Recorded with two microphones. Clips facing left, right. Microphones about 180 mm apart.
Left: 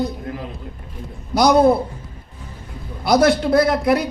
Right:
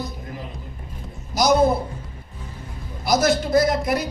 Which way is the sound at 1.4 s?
60° left (ahead or behind).